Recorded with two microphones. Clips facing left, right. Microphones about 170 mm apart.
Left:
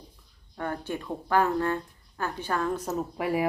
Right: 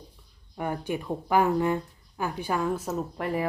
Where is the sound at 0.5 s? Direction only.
15° right (ahead or behind).